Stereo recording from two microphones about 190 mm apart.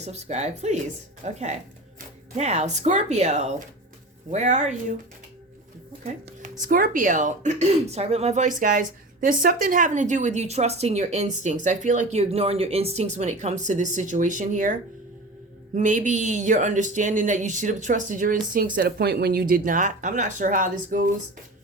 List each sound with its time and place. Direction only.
0.0 s speech: 35° right (ahead or behind)
6.6 s speech: 45° right (ahead or behind)